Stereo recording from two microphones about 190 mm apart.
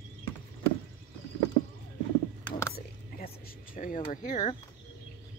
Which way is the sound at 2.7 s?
50° left (ahead or behind).